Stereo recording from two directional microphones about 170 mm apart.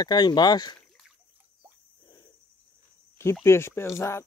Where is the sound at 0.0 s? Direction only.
25° left (ahead or behind).